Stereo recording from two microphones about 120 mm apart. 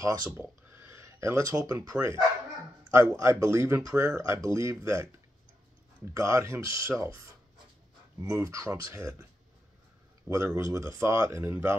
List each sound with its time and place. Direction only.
0.4 s a sound: 20° right (ahead or behind)
1.9 s speech: 30° right (ahead or behind)
6.1 s speech: 25° right (ahead or behind)
8.2 s speech: 25° right (ahead or behind)
10.2 s speech: 25° right (ahead or behind)